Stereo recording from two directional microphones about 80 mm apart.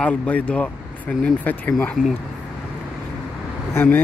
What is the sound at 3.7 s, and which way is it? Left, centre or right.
Speech, left.